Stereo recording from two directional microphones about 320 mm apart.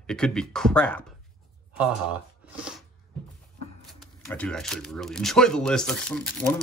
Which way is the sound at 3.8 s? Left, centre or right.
Centre.